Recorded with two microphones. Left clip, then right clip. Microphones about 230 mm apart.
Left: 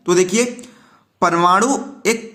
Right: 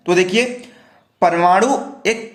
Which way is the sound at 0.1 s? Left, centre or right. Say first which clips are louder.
Right 1 dB; centre.